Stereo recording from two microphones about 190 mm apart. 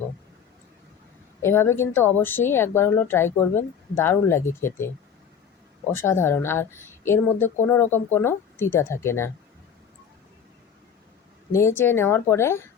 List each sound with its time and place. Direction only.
1.4 s speech: 15° left (ahead or behind)
5.9 s speech: 15° left (ahead or behind)
11.5 s speech: 15° left (ahead or behind)